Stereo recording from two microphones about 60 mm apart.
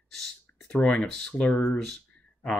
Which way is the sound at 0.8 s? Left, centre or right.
Left.